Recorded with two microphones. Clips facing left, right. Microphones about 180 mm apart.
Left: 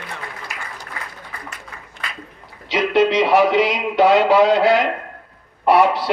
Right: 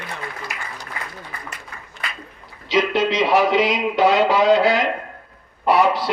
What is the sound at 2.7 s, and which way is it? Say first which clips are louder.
A man's voice: left 2 dB; 60° left (ahead or behind).